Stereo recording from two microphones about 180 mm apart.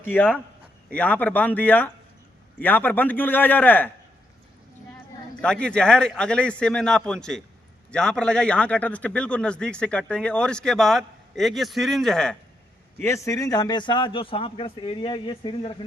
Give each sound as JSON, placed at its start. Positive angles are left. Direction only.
{"t": 0.0, "sound": "a man's voice", "side_deg": 10}
{"t": 5.4, "sound": "a man's voice", "side_deg": 5}
{"t": 13.0, "sound": "a man's voice", "side_deg": 15}